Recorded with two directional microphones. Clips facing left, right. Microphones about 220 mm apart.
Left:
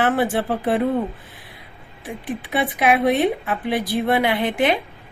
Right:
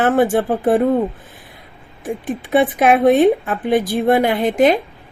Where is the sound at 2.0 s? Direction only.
50° right (ahead or behind).